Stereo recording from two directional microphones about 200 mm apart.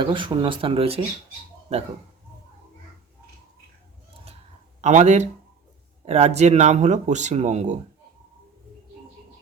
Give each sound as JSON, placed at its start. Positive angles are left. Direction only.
{"t": 0.0, "sound": "speech", "side_deg": -25}
{"t": 4.8, "sound": "speech", "side_deg": -35}